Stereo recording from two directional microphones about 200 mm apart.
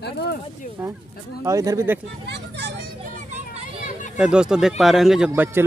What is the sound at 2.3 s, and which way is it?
Speech, 60° right (ahead or behind).